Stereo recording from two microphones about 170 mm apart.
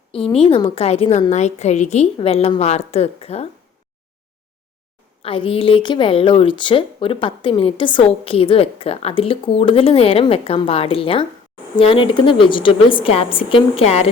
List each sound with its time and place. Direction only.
0.3 s a woman's voice: 35° left (ahead or behind)
5.2 s a woman's voice: 30° left (ahead or behind)